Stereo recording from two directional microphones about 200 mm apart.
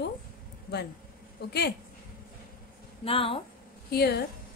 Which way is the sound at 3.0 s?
25° left (ahead or behind).